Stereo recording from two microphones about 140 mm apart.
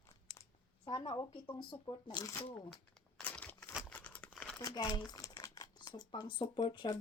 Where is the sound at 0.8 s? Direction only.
35° left (ahead or behind).